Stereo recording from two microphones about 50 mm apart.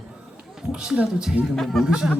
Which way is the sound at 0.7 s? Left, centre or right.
Centre.